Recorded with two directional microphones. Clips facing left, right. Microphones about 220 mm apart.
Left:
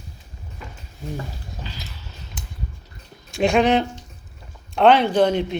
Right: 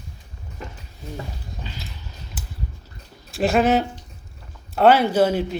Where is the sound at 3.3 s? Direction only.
5° right (ahead or behind).